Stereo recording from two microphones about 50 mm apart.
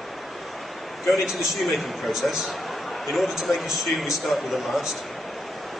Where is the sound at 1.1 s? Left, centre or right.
Centre.